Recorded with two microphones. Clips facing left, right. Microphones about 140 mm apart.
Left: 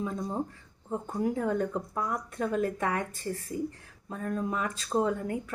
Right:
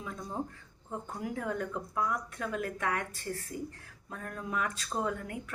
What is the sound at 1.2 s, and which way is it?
Speech, 30° left (ahead or behind).